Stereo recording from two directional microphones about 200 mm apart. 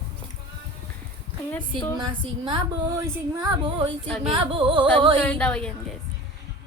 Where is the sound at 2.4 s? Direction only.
20° right (ahead or behind).